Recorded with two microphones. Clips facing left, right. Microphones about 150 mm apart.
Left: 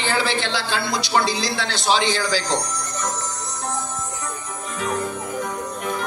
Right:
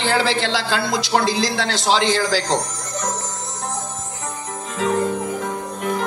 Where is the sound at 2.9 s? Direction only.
45° right (ahead or behind).